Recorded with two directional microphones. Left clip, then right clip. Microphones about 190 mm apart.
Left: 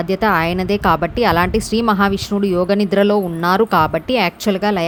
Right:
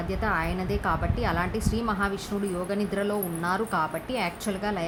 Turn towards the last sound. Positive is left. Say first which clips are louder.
# left 12 dB
turn(degrees=45)  # may be behind; listen again after turning